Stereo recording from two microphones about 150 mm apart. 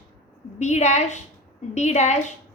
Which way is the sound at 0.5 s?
50° left (ahead or behind).